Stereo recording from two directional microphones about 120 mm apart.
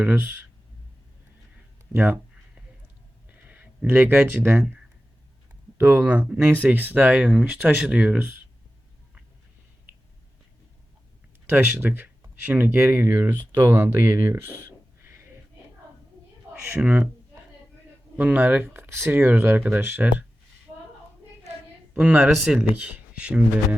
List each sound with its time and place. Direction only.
0.0 s speech: 15° right (ahead or behind)
3.2 s a sound: 15° right (ahead or behind)
5.7 s speech: 15° right (ahead or behind)
11.4 s speech: 15° right (ahead or behind)
16.7 s speech: 10° right (ahead or behind)
18.2 s speech: 15° right (ahead or behind)
21.9 s speech: 10° right (ahead or behind)